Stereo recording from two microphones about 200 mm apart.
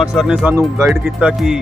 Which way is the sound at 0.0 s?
Centre (ahead or behind).